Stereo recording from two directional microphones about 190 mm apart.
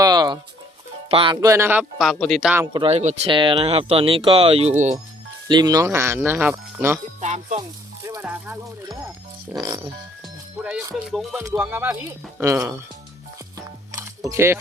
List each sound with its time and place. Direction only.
0.0 s music: 20° right (ahead or behind)
1.1 s speech: 25° right (ahead or behind); by 2.5 s 5° left (ahead or behind)
2.7 s speech: 30° right (ahead or behind)
3.3 s speech: 25° right (ahead or behind)
7.2 s speech: 35° right (ahead or behind)
8.0 s speech: 10° right (ahead or behind)
10.6 s speech: 5° right (ahead or behind)
11.1 s music: centre (ahead or behind)
11.3 s speech: 10° right (ahead or behind)
13.6 s music: 15° right (ahead or behind)
14.3 s speech: 15° right (ahead or behind)